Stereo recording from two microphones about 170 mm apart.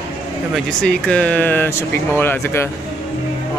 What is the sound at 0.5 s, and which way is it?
Speech, 5° left (ahead or behind).